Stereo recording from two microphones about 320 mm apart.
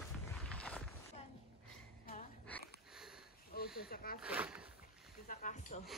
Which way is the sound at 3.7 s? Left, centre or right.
Left.